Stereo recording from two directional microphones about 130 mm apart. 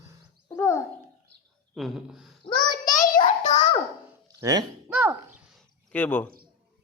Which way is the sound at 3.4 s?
65° left (ahead or behind).